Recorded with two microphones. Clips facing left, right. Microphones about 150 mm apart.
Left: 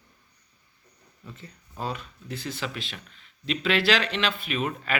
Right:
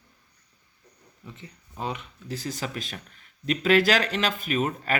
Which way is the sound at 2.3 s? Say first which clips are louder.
Right 1 dB; 35° right (ahead or behind).